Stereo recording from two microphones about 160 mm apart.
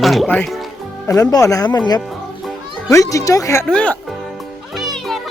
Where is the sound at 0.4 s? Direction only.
Centre (ahead or behind).